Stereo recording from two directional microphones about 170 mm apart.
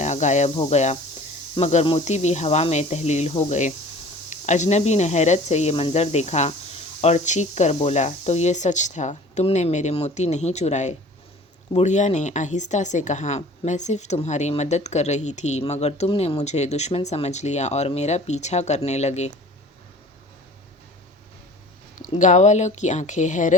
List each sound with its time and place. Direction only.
0.0 s a woman's voice: 45° left (ahead or behind)
22.2 s speech: 45° left (ahead or behind)